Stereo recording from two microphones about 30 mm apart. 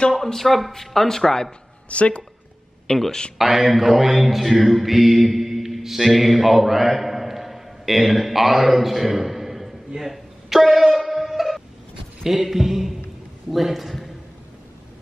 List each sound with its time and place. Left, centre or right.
0.1 s speech: centre
1.9 s speech: left
2.9 s speech: centre
3.3 s mantra: centre
9.9 s a sound: centre
12.4 s speech: centre